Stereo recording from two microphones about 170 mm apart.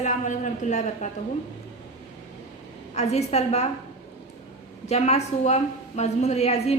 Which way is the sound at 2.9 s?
40° left (ahead or behind).